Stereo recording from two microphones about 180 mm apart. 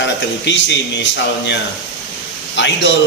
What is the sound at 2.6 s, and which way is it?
Speech, 80° left.